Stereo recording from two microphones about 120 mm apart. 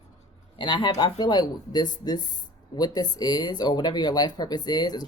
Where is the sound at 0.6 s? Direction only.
40° left (ahead or behind).